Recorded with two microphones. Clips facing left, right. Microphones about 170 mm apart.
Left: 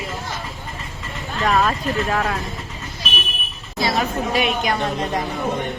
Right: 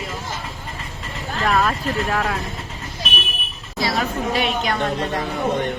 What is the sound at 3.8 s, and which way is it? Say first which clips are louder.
A woman's voice: left 1 dB; 20° left (ahead or behind).